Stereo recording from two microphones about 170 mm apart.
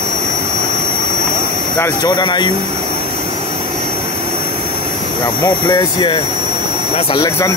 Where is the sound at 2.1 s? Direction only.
25° left (ahead or behind).